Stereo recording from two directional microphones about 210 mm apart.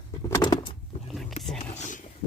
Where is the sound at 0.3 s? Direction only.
15° left (ahead or behind).